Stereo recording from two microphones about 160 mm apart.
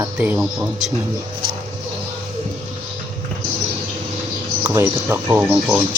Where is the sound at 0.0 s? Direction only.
10° right (ahead or behind).